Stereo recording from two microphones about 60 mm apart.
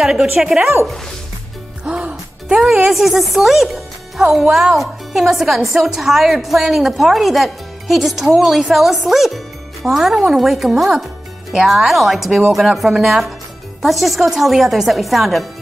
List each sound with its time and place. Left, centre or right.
0.0 s a woman's voice: centre
1.9 s music: centre
2.9 s a woman's voice: centre